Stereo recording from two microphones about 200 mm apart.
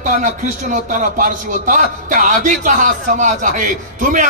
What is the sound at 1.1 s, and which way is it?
A man's voice, 45° right (ahead or behind).